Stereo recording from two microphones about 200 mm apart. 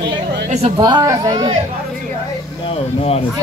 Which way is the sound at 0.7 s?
20° right (ahead or behind).